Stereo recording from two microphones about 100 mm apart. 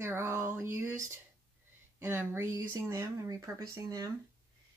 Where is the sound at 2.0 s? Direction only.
25° right (ahead or behind).